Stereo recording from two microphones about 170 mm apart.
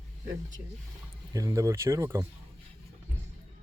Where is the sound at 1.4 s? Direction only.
20° right (ahead or behind).